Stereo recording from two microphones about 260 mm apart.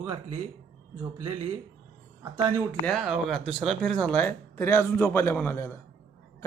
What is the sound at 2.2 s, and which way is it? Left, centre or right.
Speech, centre.